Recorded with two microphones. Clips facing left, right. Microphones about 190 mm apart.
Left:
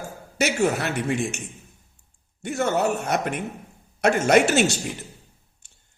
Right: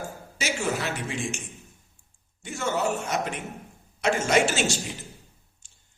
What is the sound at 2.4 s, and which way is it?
Speech, 60° left (ahead or behind).